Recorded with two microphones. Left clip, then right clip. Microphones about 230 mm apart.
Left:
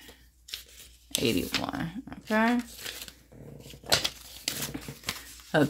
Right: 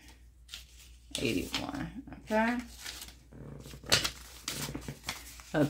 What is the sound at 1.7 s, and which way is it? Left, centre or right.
Speech, left.